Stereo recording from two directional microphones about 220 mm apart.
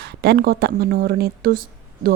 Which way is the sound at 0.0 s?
50° right (ahead or behind).